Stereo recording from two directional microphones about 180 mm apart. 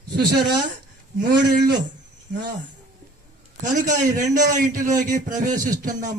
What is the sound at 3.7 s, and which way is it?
A man's voice, 45° right (ahead or behind).